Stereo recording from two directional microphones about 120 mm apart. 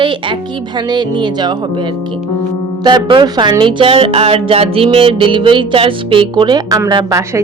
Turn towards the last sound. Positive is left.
turn(degrees=-25)  # may be behind; listen again after turning